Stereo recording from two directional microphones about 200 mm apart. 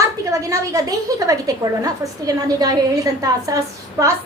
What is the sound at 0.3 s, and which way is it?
A woman's voice, 15° right (ahead or behind).